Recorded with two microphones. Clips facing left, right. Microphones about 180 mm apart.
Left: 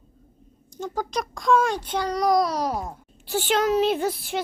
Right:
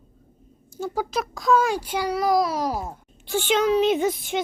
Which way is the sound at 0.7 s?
10° right (ahead or behind).